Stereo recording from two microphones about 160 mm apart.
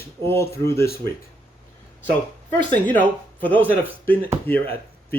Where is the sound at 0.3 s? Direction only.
15° left (ahead or behind).